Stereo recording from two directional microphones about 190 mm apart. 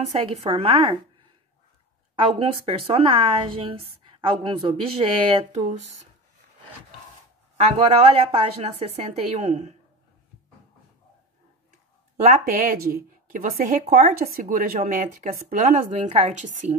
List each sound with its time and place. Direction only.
0.1 s speech: 30° right (ahead or behind)
2.1 s speech: 30° right (ahead or behind)
7.5 s a woman's voice: 35° right (ahead or behind)
12.3 s a woman's voice: 45° right (ahead or behind)